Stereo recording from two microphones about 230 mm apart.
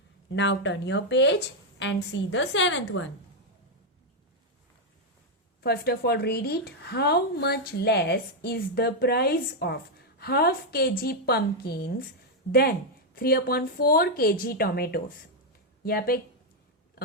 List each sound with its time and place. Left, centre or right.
0.3 s a woman's voice: left
5.6 s a woman's voice: left